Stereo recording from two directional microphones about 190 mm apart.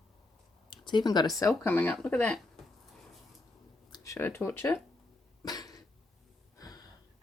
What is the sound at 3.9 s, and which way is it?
Speech, 15° left (ahead or behind).